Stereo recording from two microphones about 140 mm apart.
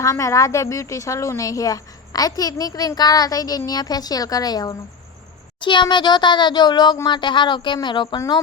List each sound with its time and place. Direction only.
0.0 s a woman's voice: 20° left (ahead or behind)